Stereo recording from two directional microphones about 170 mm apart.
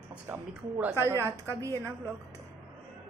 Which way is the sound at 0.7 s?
15° right (ahead or behind).